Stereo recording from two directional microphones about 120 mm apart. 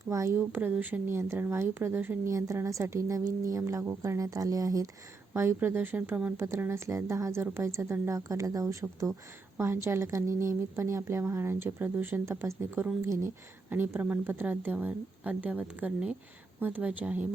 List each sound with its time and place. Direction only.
0.1 s a woman's voice: 25° right (ahead or behind)
0.5 s a woman's voice: 15° right (ahead or behind); by 4.9 s 30° right (ahead or behind)
5.3 s a woman's voice: 20° right (ahead or behind)